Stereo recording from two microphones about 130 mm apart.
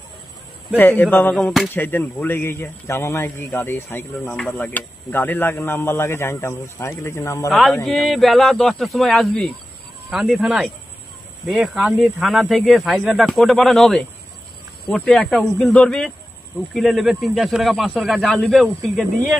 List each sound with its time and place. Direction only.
0.7 s speech: 15° left (ahead or behind)
1.8 s speech: 15° left (ahead or behind)
7.4 s speech: centre (ahead or behind)